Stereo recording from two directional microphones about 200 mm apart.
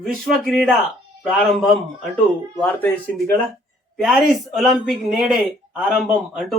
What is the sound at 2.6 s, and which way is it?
Speech, 10° left (ahead or behind).